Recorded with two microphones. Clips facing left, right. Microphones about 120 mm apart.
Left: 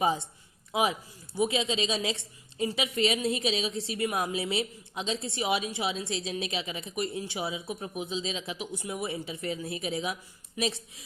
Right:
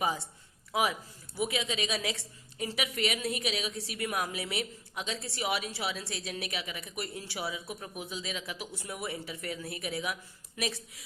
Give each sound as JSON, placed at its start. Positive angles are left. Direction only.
{"t": 0.7, "sound": "a woman's voice", "side_deg": 20}